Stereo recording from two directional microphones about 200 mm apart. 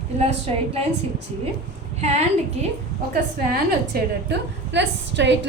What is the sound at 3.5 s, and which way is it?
A woman's voice, 50° right (ahead or behind).